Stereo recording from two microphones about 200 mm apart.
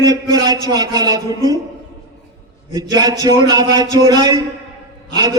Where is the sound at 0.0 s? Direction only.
20° right (ahead or behind).